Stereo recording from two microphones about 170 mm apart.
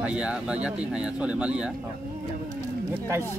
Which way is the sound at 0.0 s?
5° right (ahead or behind).